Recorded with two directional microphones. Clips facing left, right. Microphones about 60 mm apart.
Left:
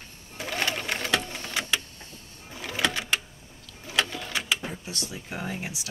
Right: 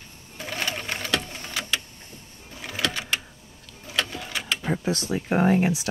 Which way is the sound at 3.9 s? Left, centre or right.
Centre.